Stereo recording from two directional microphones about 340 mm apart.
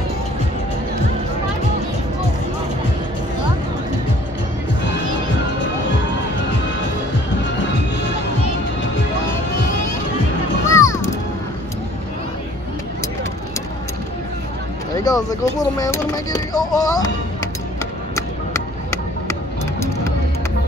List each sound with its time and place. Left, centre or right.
10.7 s music: centre
15.0 s speech: centre